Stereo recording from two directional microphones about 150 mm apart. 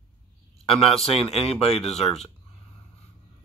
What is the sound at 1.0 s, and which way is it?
Speech, 45° left (ahead or behind).